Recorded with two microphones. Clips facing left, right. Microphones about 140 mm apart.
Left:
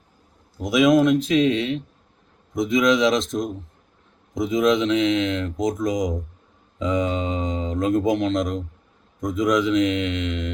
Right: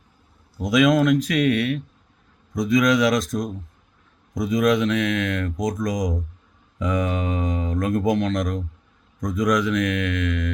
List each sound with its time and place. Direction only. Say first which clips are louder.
0.6 s speech: left 1 dB; 20° left (ahead or behind)